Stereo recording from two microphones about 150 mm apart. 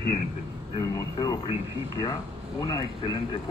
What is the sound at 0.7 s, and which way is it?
Speech, 25° left (ahead or behind).